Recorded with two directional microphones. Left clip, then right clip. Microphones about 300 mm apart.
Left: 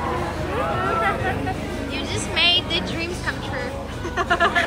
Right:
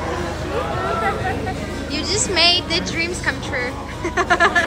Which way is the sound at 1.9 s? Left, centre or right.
Centre.